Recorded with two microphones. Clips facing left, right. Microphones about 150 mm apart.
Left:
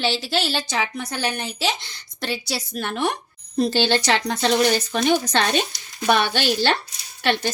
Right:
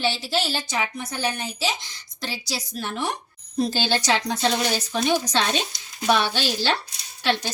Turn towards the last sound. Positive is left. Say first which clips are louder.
# left 2 dB
turn(degrees=60)  # may be behind; listen again after turning